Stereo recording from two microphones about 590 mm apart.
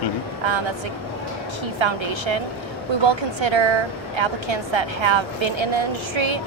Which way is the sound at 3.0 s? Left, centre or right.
Right.